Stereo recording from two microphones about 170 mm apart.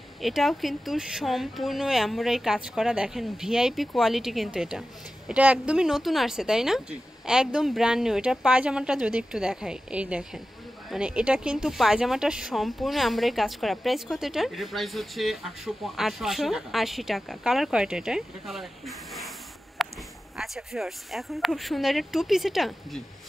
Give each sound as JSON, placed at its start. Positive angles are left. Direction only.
{"t": 0.2, "sound": "speech", "side_deg": 0}
{"t": 19.8, "sound": "a sound", "side_deg": 0}
{"t": 20.3, "sound": "speech", "side_deg": 0}